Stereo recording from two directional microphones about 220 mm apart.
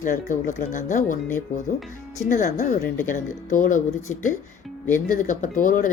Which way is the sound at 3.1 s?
35° left (ahead or behind).